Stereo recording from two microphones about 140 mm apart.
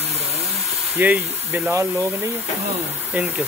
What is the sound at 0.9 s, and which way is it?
Speech, 10° right (ahead or behind).